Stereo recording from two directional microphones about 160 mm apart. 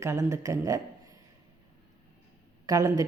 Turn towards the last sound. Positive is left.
turn(degrees=-20)  # may be behind; listen again after turning